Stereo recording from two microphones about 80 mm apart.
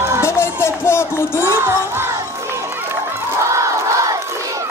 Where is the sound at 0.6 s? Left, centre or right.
Left.